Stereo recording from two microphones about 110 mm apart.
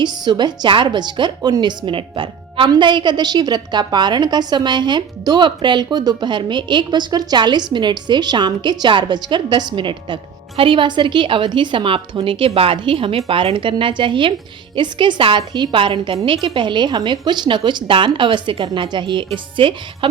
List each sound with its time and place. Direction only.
0.0 s a woman's voice: 45° right (ahead or behind)